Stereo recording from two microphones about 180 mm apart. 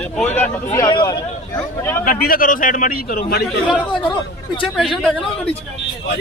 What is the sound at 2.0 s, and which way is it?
A man's voice, 50° left (ahead or behind).